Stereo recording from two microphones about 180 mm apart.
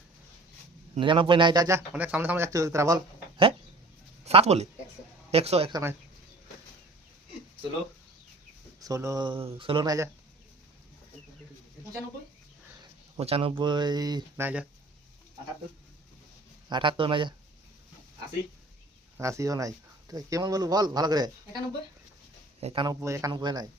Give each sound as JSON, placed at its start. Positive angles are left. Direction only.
{"t": 0.9, "sound": "speech", "side_deg": -30}
{"t": 1.9, "sound": "speech", "side_deg": -10}
{"t": 4.3, "sound": "speech", "side_deg": -35}
{"t": 5.7, "sound": "speech", "side_deg": -15}
{"t": 8.8, "sound": "speech", "side_deg": -20}
{"t": 12.8, "sound": "speech", "side_deg": -35}
{"t": 14.4, "sound": "speech", "side_deg": -5}
{"t": 16.6, "sound": "speech", "side_deg": -25}
{"t": 19.1, "sound": "speech", "side_deg": -15}
{"t": 22.6, "sound": "speech", "side_deg": -25}
{"t": 23.0, "sound": "speech", "side_deg": -15}